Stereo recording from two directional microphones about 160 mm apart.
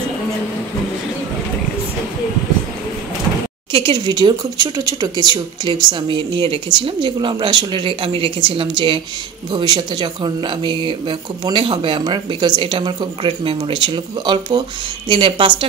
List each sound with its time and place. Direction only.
3.7 s speech: 30° right (ahead or behind)